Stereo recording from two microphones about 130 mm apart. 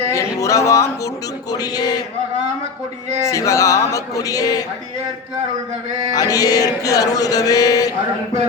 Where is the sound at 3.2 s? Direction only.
25° left (ahead or behind).